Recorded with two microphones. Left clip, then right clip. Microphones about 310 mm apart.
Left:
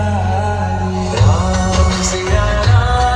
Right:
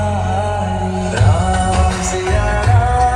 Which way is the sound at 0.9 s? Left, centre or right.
Centre.